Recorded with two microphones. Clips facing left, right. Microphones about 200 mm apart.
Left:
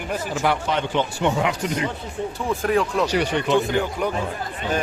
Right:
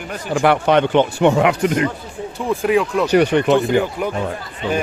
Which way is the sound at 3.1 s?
55° right (ahead or behind).